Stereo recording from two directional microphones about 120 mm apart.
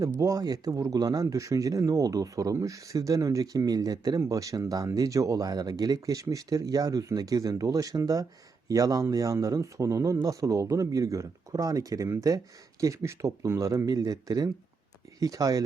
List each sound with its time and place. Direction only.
0.2 s speech: 30° right (ahead or behind)